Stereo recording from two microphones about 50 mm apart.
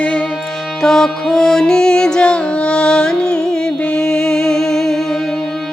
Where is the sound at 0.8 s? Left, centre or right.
Centre.